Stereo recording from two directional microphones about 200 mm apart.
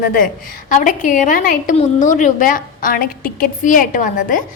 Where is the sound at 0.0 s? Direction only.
45° left (ahead or behind).